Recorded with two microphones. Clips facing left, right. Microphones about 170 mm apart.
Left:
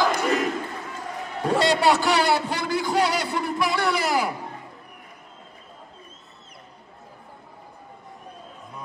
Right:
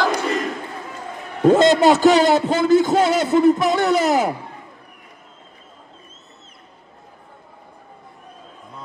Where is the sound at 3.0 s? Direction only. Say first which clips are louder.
Right 10 dB; 50° right (ahead or behind).